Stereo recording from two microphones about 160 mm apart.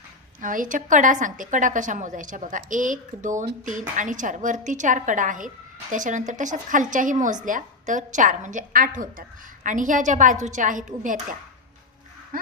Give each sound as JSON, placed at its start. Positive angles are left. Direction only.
{"t": 0.4, "sound": "a woman's voice", "side_deg": -55}
{"t": 12.3, "sound": "speech", "side_deg": -60}